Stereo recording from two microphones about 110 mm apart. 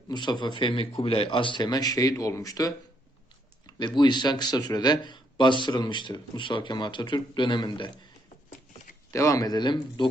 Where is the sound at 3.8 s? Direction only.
45° left (ahead or behind).